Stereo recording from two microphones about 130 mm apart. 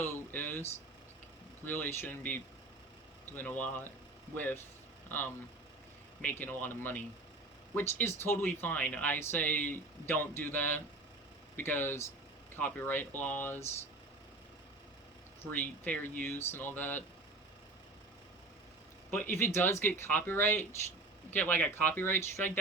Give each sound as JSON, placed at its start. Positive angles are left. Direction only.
{"t": 0.0, "sound": "a sound", "side_deg": 15}
{"t": 1.6, "sound": "speech", "side_deg": 15}
{"t": 15.4, "sound": "speech", "side_deg": 15}
{"t": 19.1, "sound": "speech", "side_deg": 20}